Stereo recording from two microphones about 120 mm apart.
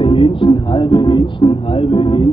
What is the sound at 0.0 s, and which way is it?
Speech, 45° left (ahead or behind).